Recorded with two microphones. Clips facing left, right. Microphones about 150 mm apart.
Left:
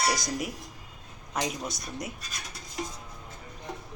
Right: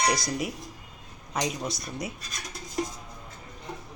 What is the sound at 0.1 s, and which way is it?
Speech, centre (ahead or behind).